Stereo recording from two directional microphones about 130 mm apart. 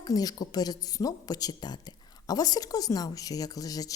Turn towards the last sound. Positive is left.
turn(degrees=30)  # may be behind; listen again after turning